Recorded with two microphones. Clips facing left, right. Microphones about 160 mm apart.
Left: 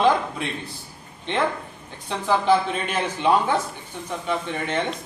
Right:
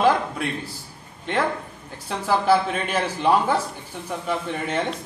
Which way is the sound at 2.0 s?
5° right (ahead or behind).